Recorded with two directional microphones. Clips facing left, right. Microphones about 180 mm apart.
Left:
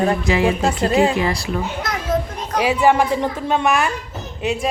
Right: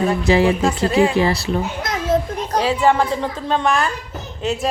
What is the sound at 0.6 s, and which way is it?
Speech, 35° left (ahead or behind).